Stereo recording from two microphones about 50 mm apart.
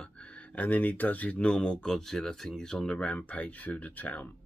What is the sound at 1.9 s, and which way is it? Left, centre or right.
Speech, centre.